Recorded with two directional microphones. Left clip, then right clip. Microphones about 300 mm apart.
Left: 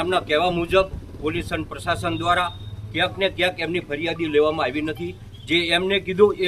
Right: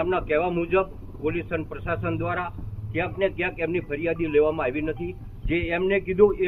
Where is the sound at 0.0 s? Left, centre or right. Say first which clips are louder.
Left 3 dB; left.